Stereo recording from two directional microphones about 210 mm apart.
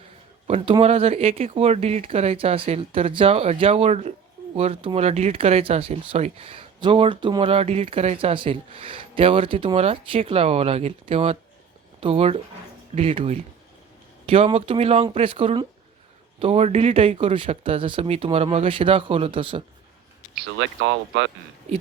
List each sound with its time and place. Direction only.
0.4 s speech: 25° right (ahead or behind)
20.6 s speech: 65° right (ahead or behind)